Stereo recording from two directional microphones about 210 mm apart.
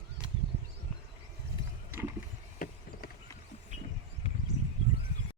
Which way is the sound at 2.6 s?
40° left (ahead or behind).